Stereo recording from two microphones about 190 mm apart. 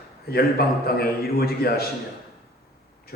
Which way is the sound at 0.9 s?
55° left (ahead or behind).